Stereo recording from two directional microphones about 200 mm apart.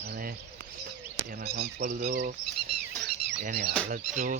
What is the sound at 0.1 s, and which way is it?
Bird, 45° right (ahead or behind).